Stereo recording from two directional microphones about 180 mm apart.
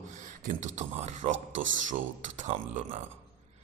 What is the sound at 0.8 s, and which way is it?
A man's voice, 40° right (ahead or behind).